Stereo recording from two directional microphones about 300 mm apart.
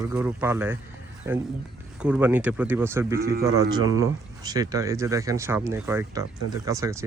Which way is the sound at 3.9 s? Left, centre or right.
Centre.